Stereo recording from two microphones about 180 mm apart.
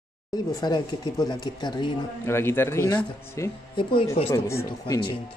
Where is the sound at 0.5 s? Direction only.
20° left (ahead or behind).